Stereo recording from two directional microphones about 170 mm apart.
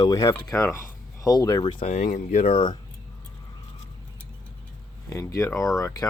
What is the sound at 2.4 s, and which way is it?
Speech, 30° left (ahead or behind).